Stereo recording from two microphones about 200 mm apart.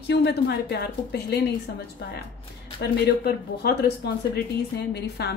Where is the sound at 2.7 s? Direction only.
55° left (ahead or behind).